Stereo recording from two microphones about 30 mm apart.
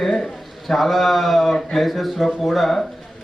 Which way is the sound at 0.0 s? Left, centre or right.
Centre.